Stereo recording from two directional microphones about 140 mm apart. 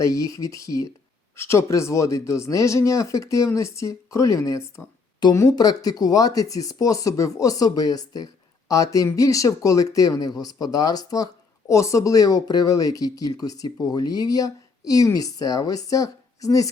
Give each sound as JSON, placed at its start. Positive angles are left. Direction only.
{"t": 0.0, "sound": "speech", "side_deg": 25}